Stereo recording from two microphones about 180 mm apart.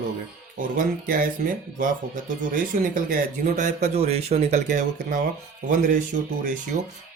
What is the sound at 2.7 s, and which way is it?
Speech, 45° right (ahead or behind).